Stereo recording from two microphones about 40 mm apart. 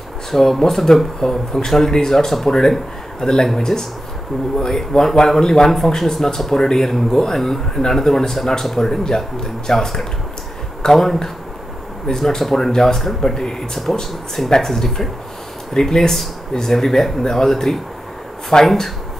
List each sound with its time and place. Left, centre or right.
0.3 s speech: centre